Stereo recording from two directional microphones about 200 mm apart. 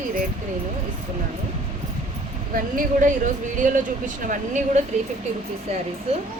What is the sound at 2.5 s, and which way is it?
Speech, 40° right (ahead or behind).